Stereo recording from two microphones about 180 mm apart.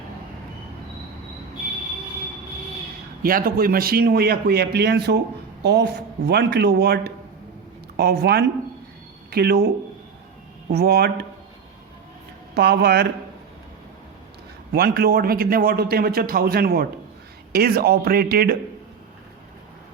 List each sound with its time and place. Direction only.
3.2 s a man's voice: 55° right (ahead or behind)
10.7 s a man's voice: 60° right (ahead or behind)
12.5 s a man's voice: 65° right (ahead or behind)
14.7 s a man's voice: 60° right (ahead or behind)